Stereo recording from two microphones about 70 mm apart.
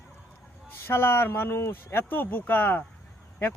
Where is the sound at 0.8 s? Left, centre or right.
Left.